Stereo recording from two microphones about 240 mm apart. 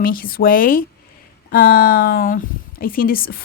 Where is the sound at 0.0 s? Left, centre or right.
Left.